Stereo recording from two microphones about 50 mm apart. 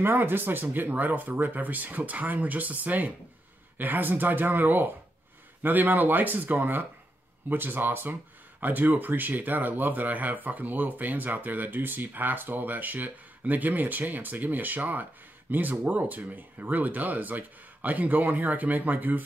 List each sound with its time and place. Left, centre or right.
0.0 s speech: right